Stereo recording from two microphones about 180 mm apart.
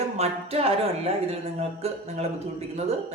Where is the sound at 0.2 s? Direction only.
35° right (ahead or behind).